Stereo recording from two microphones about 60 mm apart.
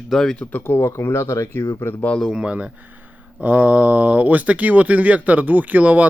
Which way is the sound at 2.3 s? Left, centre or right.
Centre.